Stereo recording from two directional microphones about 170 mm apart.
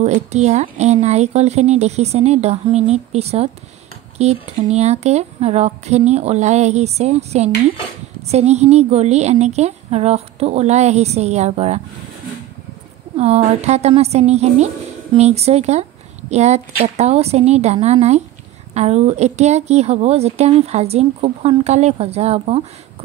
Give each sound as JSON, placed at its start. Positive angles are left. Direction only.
{"t": 0.0, "sound": "a woman's voice", "side_deg": -40}
{"t": 13.1, "sound": "a woman's voice", "side_deg": -35}